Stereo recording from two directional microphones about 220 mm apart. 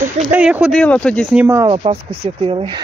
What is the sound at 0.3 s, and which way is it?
Speech, 5° right (ahead or behind).